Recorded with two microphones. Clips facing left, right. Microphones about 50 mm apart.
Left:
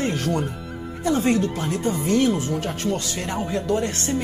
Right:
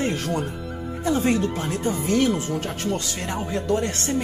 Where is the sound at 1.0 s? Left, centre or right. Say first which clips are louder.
Left 1 dB; left.